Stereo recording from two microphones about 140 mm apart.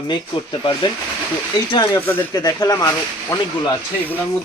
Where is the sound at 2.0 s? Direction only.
15° left (ahead or behind).